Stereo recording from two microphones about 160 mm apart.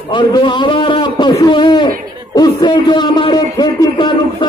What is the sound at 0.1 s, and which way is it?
A man's voice, 30° left (ahead or behind).